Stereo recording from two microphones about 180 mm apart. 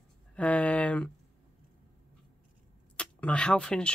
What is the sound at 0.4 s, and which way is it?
Speech, 5° left (ahead or behind).